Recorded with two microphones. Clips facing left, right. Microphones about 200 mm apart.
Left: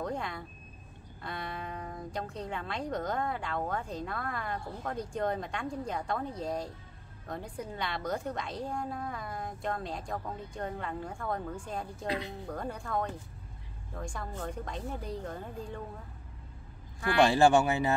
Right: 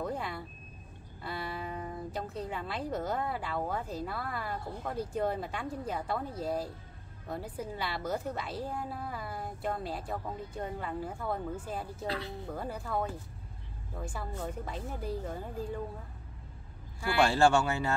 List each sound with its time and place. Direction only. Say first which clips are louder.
0.0 s vehicle: even; 5° right (ahead or behind)
1.2 s a woman's voice: right 1 dB; 5° right (ahead or behind)
17.2 s speech: left 2 dB; 15° left (ahead or behind)